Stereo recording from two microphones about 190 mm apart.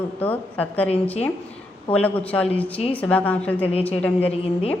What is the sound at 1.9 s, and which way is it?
A woman's voice, 5° left (ahead or behind).